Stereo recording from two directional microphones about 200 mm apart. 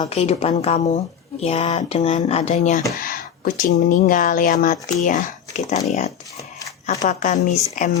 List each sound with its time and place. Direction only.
0.0 s speech: 30° left (ahead or behind)
6.8 s speech: 40° left (ahead or behind)